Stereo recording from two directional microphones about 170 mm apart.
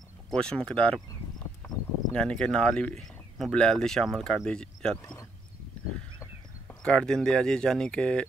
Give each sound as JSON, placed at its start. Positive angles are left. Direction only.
{"t": 0.3, "sound": "speech", "side_deg": 5}
{"t": 2.1, "sound": "speech", "side_deg": 5}
{"t": 6.8, "sound": "speech", "side_deg": 5}